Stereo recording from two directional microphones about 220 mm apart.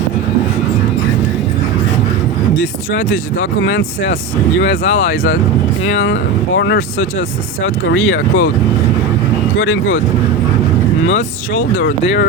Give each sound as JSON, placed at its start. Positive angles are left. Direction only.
{"t": 2.6, "sound": "a sound", "side_deg": 65}
{"t": 3.6, "sound": "speech", "side_deg": 60}
{"t": 9.6, "sound": "speech", "side_deg": 65}